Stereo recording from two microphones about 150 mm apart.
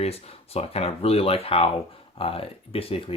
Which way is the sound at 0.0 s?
40° left (ahead or behind).